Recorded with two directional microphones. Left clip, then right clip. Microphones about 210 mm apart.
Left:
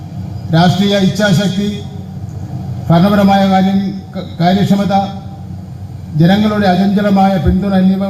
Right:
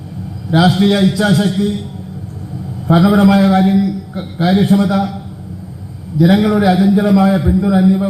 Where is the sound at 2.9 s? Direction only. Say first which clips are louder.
Left 2 dB; 35° left (ahead or behind).